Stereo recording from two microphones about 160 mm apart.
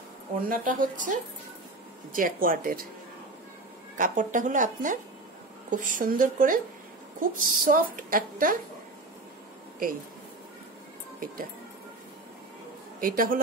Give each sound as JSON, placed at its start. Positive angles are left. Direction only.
{"t": 0.4, "sound": "a woman's voice", "side_deg": -60}
{"t": 2.1, "sound": "a woman's voice", "side_deg": -60}
{"t": 3.9, "sound": "a woman's voice", "side_deg": -55}
{"t": 13.0, "sound": "a woman's voice", "side_deg": -60}